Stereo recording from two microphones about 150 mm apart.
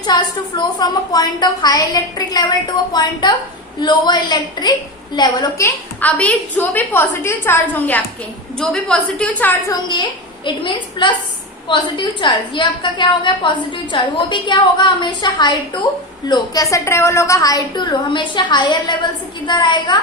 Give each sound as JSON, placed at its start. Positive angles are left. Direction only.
{"t": 0.0, "sound": "a woman's voice", "side_deg": 30}
{"t": 10.4, "sound": "a woman's voice", "side_deg": 30}